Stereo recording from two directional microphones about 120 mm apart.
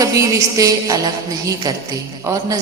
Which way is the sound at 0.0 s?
25° right (ahead or behind).